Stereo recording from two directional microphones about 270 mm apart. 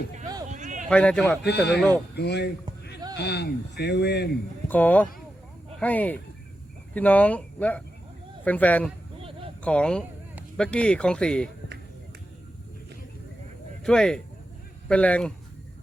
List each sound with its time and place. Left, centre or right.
0.5 s a sound: right
0.9 s speech: centre
1.5 s speech: left
4.7 s speech: centre
13.8 s speech: centre